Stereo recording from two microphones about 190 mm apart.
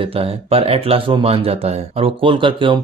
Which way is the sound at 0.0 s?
30° right (ahead or behind).